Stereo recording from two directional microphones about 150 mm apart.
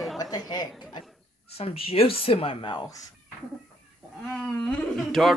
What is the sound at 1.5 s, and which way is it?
Speech, 40° left (ahead or behind).